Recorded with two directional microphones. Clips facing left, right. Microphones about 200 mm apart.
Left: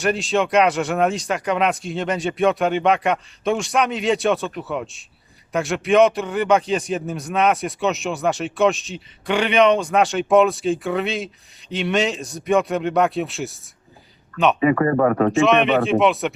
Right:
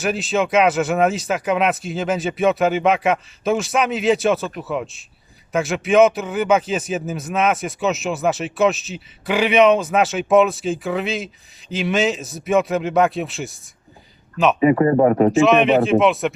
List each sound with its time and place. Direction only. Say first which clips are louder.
0.0 s speech: even; centre (ahead or behind)
14.6 s speech: right 4 dB; 20° right (ahead or behind)
15.3 s speech: right 2 dB; centre (ahead or behind)